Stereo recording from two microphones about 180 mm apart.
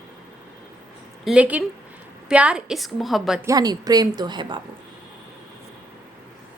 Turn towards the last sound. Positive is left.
turn(degrees=-25)  # may be behind; listen again after turning